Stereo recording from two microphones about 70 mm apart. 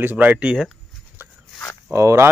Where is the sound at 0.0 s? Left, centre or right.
Right.